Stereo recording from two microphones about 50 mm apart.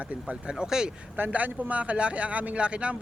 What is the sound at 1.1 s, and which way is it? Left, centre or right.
A man's voice, right.